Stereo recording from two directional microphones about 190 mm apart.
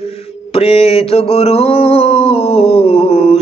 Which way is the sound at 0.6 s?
30° left (ahead or behind).